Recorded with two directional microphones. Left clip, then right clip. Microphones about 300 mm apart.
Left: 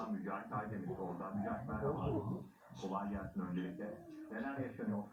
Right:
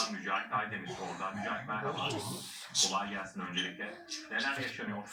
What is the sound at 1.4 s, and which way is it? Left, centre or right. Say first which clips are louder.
Speech: right 6 dB; right.